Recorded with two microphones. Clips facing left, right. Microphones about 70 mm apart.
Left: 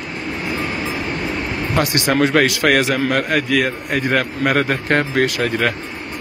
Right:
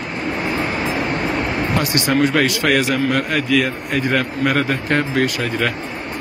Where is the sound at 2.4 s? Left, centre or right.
Left.